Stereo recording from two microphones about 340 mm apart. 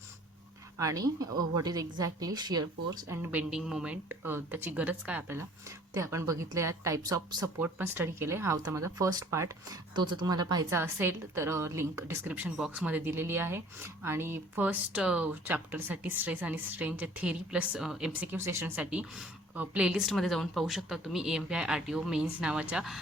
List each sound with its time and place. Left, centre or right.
0.8 s speech: centre